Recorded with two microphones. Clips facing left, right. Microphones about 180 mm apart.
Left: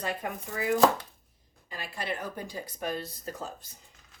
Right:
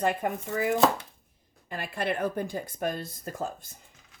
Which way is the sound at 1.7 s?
55° right (ahead or behind).